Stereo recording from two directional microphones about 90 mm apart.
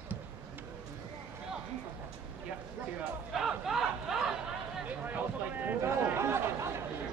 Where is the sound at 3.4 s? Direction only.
5° right (ahead or behind).